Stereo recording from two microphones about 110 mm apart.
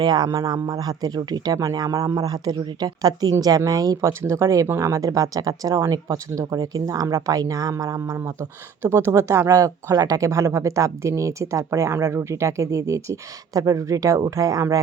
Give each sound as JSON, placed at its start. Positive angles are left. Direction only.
{"t": 0.0, "sound": "speech", "side_deg": -40}